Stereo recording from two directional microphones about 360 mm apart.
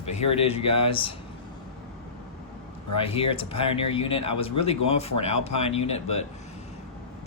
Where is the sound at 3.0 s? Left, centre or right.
Centre.